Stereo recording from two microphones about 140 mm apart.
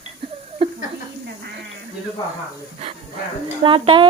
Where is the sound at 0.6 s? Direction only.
40° right (ahead or behind).